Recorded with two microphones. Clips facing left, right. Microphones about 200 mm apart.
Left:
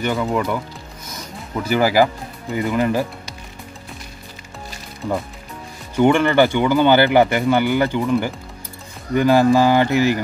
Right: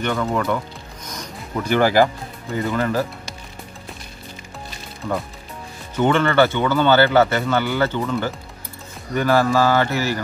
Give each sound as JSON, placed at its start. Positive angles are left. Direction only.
{"t": 0.0, "sound": "speech", "side_deg": 5}
{"t": 5.0, "sound": "speech", "side_deg": 5}